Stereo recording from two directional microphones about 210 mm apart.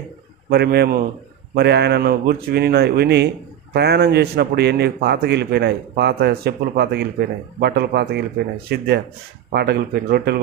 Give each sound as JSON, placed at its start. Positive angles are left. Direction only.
{"t": 0.5, "sound": "a man's voice", "side_deg": -50}